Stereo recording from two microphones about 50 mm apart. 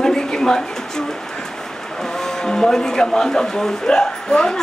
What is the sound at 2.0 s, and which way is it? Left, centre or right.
Speech, centre.